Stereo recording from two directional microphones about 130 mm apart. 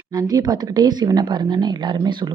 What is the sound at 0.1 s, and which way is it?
Speech, 30° right (ahead or behind).